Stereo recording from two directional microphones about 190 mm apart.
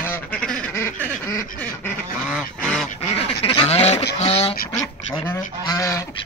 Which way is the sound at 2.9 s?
30° left (ahead or behind).